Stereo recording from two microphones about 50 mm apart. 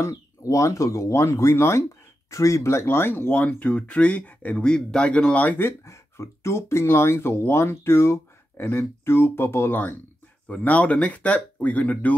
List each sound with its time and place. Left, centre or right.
0.0 s speech: left
2.3 s speech: left
3.3 s speech: left
4.6 s speech: centre
5.6 s speech: left
10.5 s speech: left